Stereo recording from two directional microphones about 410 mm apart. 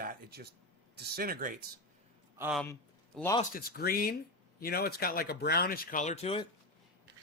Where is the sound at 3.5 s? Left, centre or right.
Left.